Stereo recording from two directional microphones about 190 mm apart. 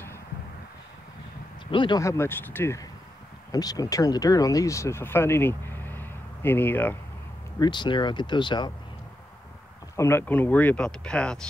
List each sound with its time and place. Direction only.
1.7 s speech: 25° left (ahead or behind)
7.5 s speech: 25° left (ahead or behind)
9.9 s speech: 15° left (ahead or behind)